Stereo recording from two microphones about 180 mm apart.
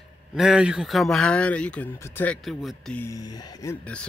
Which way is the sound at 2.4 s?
Centre (ahead or behind).